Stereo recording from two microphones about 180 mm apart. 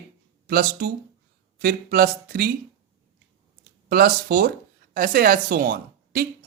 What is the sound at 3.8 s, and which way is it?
A woman's voice, 55° right (ahead or behind).